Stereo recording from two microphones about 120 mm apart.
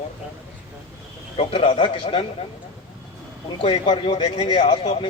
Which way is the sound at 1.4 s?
55° left (ahead or behind).